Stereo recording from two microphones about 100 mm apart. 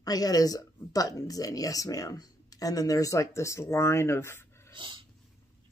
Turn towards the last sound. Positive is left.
turn(degrees=-55)  # may be behind; listen again after turning